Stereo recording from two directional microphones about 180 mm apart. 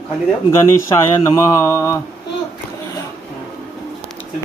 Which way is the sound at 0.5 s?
15° left (ahead or behind).